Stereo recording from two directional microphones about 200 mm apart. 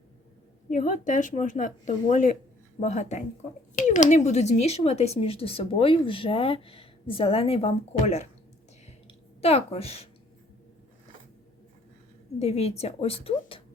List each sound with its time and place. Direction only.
0.7 s a woman's voice: 40° left (ahead or behind)
12.4 s speech: 30° left (ahead or behind)